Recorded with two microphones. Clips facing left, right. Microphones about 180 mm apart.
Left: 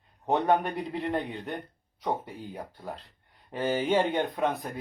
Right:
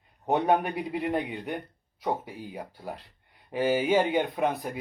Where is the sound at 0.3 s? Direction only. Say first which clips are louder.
Right 1 dB; 10° right (ahead or behind).